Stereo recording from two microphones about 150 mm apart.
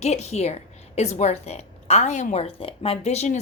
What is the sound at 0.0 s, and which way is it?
A woman's voice, 45° left (ahead or behind).